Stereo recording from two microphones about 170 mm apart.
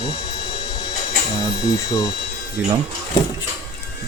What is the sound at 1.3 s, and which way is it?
Speech, 20° left (ahead or behind).